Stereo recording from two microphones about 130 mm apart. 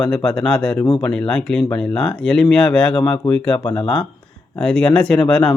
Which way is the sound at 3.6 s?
40° left (ahead or behind).